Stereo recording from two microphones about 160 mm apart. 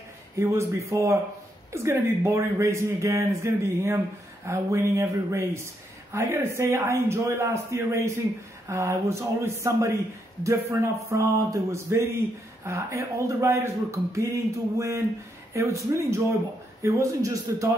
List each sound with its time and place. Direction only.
0.4 s a man's voice: 15° right (ahead or behind)